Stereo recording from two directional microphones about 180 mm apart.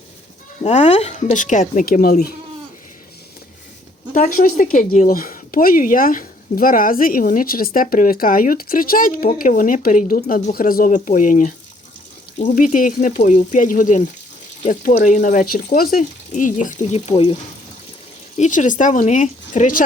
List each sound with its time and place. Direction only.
0.6 s speech: 35° left (ahead or behind); by 2.3 s 55° left (ahead or behind)
4.1 s speech: 50° left (ahead or behind); by 17.3 s 35° left (ahead or behind)
18.3 s speech: 45° left (ahead or behind)